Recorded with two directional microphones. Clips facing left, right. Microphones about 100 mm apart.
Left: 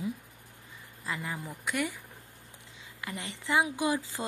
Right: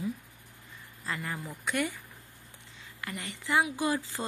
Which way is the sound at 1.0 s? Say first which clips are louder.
Even; 10° left (ahead or behind).